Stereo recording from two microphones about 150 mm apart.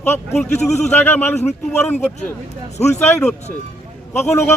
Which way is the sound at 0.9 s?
15° left (ahead or behind).